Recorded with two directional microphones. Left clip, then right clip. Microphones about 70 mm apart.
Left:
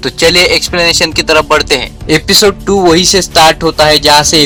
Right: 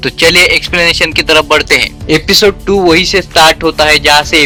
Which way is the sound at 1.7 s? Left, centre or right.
Right.